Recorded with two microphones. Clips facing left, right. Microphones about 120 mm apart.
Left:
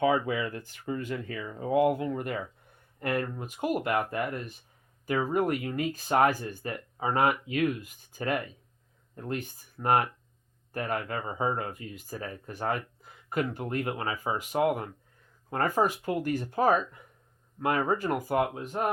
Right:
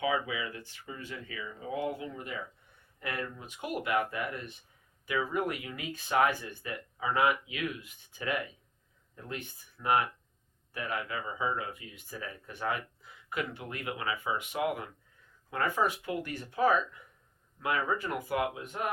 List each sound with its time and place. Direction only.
0.0 s speech: 45° left (ahead or behind)